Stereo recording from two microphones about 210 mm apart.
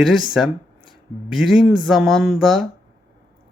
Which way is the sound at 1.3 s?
Centre (ahead or behind).